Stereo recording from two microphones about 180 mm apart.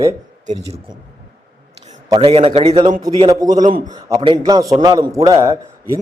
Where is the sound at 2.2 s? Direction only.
30° right (ahead or behind).